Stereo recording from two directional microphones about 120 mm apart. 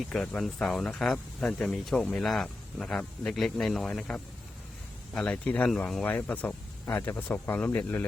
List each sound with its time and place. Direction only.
0.0 s speech: 5° left (ahead or behind)